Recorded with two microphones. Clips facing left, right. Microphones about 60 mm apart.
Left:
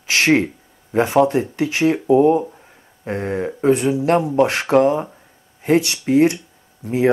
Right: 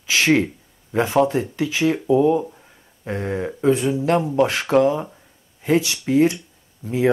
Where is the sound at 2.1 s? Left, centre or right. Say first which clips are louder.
Left 3 dB; left.